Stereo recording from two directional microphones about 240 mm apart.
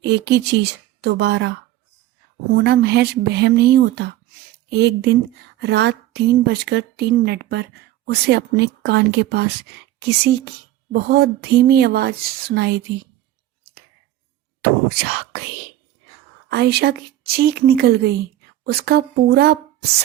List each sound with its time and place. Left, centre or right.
0.0 s a woman's voice: right
16.5 s a woman's voice: right